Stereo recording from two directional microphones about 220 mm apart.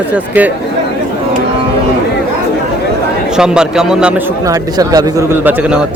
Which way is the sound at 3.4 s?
Centre (ahead or behind).